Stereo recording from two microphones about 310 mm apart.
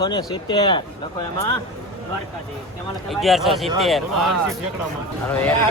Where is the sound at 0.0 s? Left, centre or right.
Centre.